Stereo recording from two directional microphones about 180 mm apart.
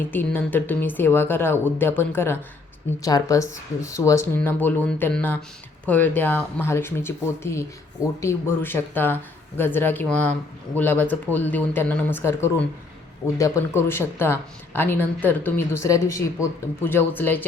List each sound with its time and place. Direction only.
0.1 s speech: 10° left (ahead or behind)